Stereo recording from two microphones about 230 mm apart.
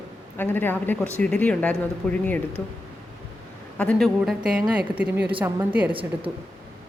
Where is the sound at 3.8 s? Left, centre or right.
Centre.